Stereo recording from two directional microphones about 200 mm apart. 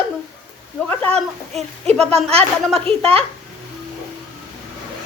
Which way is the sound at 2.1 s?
30° right (ahead or behind).